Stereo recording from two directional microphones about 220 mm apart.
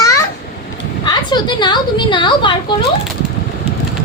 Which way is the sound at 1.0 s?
20° left (ahead or behind).